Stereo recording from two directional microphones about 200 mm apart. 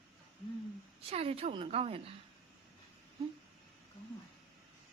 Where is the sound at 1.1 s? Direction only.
30° right (ahead or behind).